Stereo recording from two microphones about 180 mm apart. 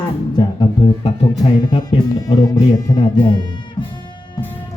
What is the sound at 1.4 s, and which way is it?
A woman's voice, 25° left (ahead or behind).